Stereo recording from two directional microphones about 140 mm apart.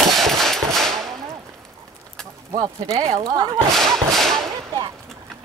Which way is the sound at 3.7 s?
Centre (ahead or behind).